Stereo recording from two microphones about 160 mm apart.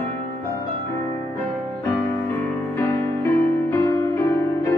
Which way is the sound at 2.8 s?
15° left (ahead or behind).